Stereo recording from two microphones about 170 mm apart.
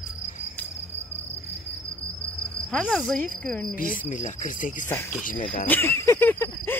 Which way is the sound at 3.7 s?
50° left (ahead or behind).